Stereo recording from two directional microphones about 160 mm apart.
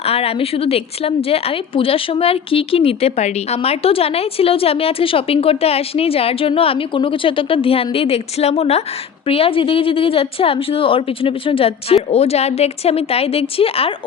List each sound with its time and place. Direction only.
0.0 s a woman's voice: 40° left (ahead or behind)